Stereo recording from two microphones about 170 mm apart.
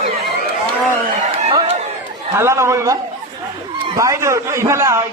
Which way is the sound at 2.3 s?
15° right (ahead or behind).